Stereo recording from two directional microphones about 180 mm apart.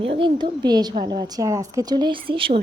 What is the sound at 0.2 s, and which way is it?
A woman's voice, 25° right (ahead or behind).